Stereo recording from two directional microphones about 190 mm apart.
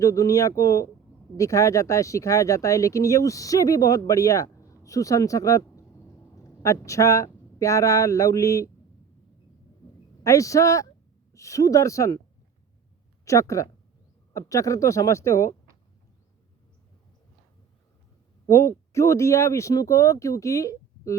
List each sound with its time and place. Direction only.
0.0 s speech: 15° left (ahead or behind)
10.2 s speech: 15° left (ahead or behind)
13.2 s speech: 15° left (ahead or behind)
18.4 s speech: 15° left (ahead or behind)